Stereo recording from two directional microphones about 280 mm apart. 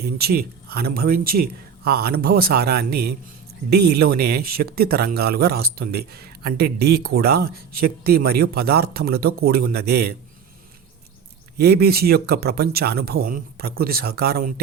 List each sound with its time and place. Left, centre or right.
0.0 s speech: right
11.5 s speech: right